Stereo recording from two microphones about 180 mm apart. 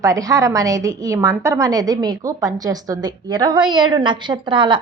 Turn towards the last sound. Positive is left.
turn(degrees=-25)  # may be behind; listen again after turning